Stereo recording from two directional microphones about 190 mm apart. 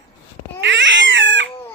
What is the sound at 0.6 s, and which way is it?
Crying, 70° right (ahead or behind).